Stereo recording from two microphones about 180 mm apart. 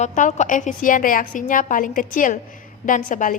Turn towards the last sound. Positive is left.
turn(degrees=45)  # may be behind; listen again after turning